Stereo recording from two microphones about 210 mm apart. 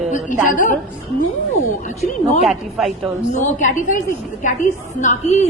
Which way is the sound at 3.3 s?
35° left (ahead or behind).